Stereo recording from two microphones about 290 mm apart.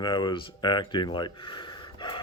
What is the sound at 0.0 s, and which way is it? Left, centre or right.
Speech, centre.